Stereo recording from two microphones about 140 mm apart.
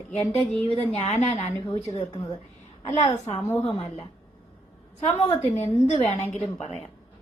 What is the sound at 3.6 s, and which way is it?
Speech, 45° left (ahead or behind).